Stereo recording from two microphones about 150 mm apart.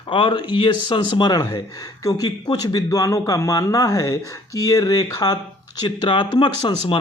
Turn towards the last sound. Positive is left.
turn(degrees=35)  # may be behind; listen again after turning